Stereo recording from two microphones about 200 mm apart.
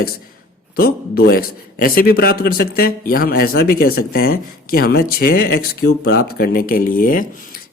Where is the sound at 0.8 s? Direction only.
50° left (ahead or behind).